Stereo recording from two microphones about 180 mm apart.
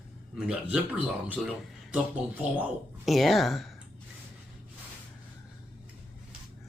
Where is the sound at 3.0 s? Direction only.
Centre (ahead or behind).